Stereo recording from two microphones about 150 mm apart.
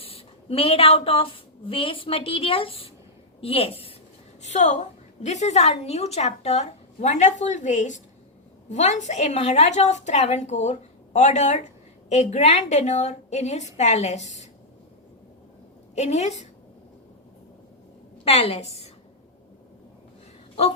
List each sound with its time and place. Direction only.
0.0 s a woman's voice: 40° left (ahead or behind)
4.4 s a woman's voice: 50° left (ahead or behind)
16.0 s a woman's voice: 50° left (ahead or behind)
18.3 s a woman's voice: 45° left (ahead or behind)